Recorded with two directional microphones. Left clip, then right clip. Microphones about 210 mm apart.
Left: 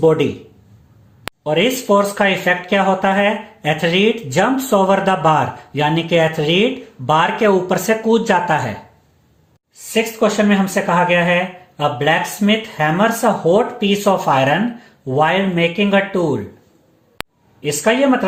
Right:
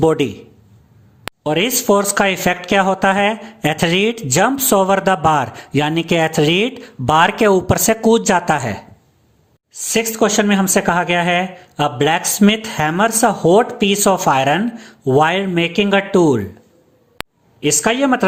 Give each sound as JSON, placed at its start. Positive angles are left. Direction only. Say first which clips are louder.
{"t": 0.0, "sound": "speech", "louder": "left 1 dB", "side_deg": -45}
{"t": 1.5, "sound": "speech", "louder": "even", "side_deg": -45}
{"t": 9.9, "sound": "speech", "louder": "right 1 dB", "side_deg": -50}
{"t": 17.2, "sound": "a sound", "louder": "even", "side_deg": 0}
{"t": 17.6, "sound": "speech", "louder": "even", "side_deg": -45}